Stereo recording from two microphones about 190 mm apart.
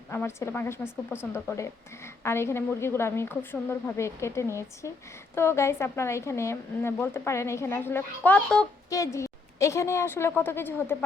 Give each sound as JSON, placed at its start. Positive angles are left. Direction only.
{"t": 0.1, "sound": "a woman's voice", "side_deg": 15}